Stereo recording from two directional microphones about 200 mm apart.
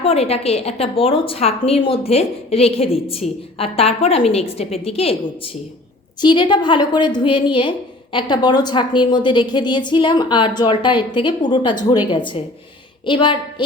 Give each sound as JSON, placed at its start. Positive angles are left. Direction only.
{"t": 0.0, "sound": "a woman's voice", "side_deg": 30}
{"t": 6.2, "sound": "a woman's voice", "side_deg": 20}